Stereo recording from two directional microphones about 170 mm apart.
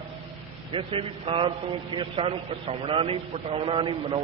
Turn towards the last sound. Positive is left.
turn(degrees=-30)  # may be behind; listen again after turning